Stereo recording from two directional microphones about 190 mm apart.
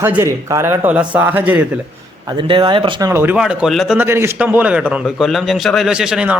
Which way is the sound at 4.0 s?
15° right (ahead or behind).